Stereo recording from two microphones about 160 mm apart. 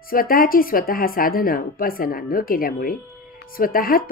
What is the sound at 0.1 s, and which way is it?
Speech, 65° left (ahead or behind).